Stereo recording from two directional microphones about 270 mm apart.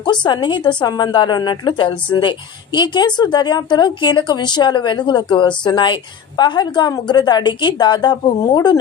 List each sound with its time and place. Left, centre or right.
0.3 s a woman's voice: centre